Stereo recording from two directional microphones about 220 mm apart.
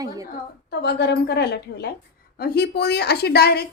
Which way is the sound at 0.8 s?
50° left (ahead or behind).